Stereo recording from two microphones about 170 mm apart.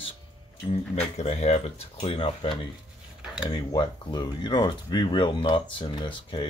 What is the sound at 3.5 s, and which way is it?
Speech, 25° left (ahead or behind).